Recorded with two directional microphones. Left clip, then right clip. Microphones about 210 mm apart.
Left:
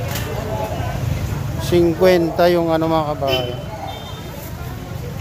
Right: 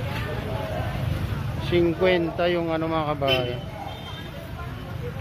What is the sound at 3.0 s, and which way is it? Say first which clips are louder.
Speech: left 4 dB; 20° right (ahead or behind).